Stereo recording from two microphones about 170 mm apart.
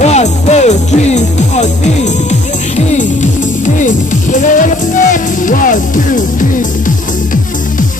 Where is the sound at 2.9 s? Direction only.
45° left (ahead or behind).